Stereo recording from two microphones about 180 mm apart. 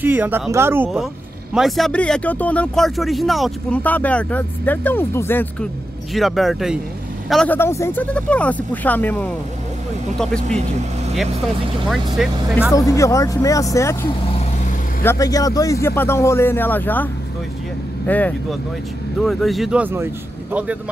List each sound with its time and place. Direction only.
0.0 s speech: 10° right (ahead or behind)
1.5 s speech: centre (ahead or behind)
6.1 s speech: centre (ahead or behind)
12.2 s speech: centre (ahead or behind)
12.7 s speech: 15° left (ahead or behind)
15.0 s speech: 20° left (ahead or behind); by 20.1 s 10° right (ahead or behind)